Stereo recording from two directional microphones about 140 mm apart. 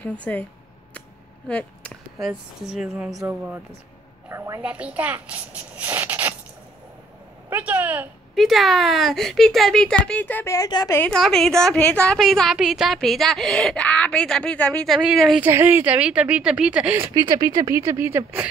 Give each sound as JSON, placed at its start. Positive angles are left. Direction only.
{"t": 0.0, "sound": "speech", "side_deg": 10}
{"t": 1.5, "sound": "a woman's voice", "side_deg": 10}
{"t": 3.2, "sound": "a child's voice", "side_deg": -15}
{"t": 7.4, "sound": "a sound", "side_deg": -15}
{"t": 8.4, "sound": "a woman's voice", "side_deg": 0}
{"t": 11.0, "sound": "a woman's voice", "side_deg": 5}
{"t": 15.4, "sound": "speech", "side_deg": -15}
{"t": 17.0, "sound": "speech", "side_deg": -25}